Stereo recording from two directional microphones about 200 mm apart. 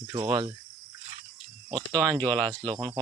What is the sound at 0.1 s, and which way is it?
Cricket, 20° right (ahead or behind).